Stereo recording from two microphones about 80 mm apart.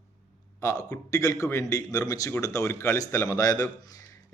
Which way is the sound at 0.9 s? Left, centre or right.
Left.